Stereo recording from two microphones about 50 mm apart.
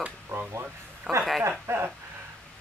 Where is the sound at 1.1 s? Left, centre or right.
Centre.